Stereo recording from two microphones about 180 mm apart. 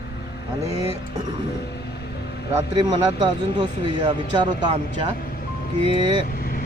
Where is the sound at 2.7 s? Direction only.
25° right (ahead or behind).